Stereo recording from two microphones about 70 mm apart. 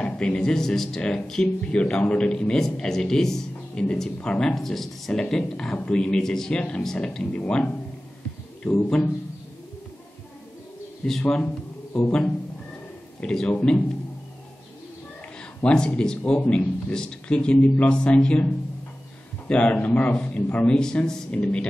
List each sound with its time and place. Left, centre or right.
0.0 s speech: centre
11.1 s a man's voice: centre
13.2 s speech: centre
15.6 s speech: centre